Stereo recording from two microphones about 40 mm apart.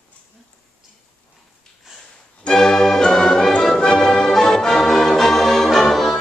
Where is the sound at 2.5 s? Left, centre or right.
Centre.